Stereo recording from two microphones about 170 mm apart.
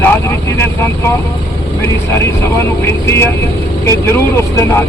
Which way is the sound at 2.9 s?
15° left (ahead or behind).